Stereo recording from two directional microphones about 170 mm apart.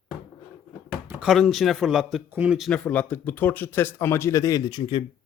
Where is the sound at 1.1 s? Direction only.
5° right (ahead or behind).